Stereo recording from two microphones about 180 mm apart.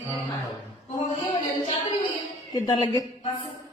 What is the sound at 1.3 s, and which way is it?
Music, 25° left (ahead or behind).